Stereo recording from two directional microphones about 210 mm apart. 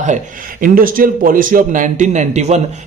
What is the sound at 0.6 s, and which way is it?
A man's voice, 40° right (ahead or behind).